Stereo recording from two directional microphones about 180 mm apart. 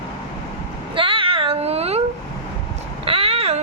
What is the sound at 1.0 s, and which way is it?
Cat, 30° right (ahead or behind).